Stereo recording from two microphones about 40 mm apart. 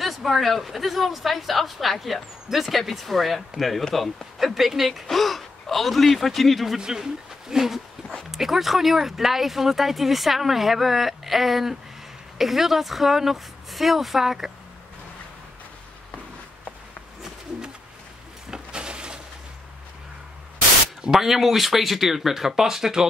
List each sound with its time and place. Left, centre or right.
0.0 s speech: centre
6.8 s speech: centre
18.5 s a sound: right
21.1 s speech: centre